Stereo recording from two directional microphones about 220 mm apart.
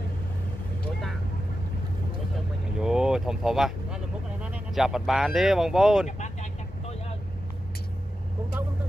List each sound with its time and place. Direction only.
2.8 s vehicle: 5° right (ahead or behind)
6.0 s vehicle: 30° left (ahead or behind)